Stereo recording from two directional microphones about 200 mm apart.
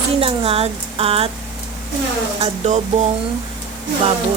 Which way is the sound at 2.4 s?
35° right (ahead or behind).